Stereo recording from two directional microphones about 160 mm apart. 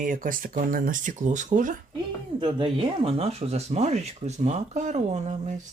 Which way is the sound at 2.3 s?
30° right (ahead or behind).